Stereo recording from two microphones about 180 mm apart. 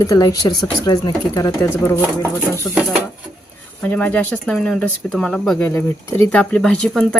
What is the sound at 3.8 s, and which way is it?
Speech, 10° left (ahead or behind).